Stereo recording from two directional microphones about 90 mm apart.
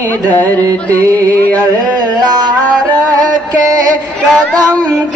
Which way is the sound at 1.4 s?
15° left (ahead or behind).